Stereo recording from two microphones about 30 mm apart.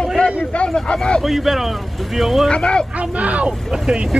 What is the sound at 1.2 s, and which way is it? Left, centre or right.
Speech, centre.